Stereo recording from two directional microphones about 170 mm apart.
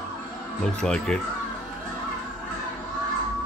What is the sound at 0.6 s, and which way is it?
Speech, 5° left (ahead or behind).